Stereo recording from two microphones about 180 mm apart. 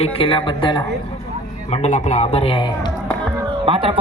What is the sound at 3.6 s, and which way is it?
Speech, 30° right (ahead or behind).